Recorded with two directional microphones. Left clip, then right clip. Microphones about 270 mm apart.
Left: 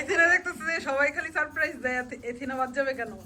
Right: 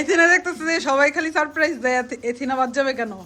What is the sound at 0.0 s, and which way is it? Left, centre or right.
Speech, centre.